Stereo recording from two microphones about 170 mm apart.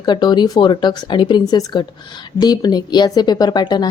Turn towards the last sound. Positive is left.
turn(degrees=25)  # may be behind; listen again after turning